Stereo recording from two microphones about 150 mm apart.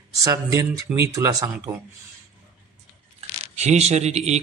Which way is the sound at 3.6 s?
45° right (ahead or behind).